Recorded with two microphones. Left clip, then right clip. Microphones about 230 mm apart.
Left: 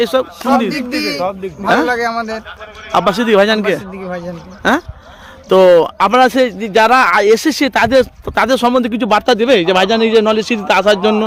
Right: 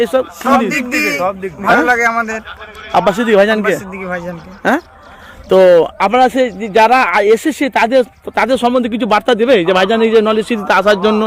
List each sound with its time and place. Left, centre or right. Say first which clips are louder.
0.0 s a man's voice: right 1 dB; centre
1.2 s speech: right 2 dB; centre
1.6 s a man's voice: right 3 dB; centre
5.5 s a man's voice: even; centre